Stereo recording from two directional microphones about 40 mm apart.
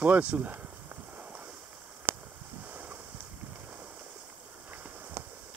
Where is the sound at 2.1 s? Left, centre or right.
Right.